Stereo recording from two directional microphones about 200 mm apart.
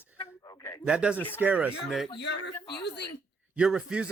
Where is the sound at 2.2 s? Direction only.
60° left (ahead or behind).